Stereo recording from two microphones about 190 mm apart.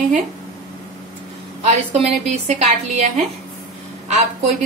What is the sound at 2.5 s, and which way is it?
A woman's voice, 40° right (ahead or behind).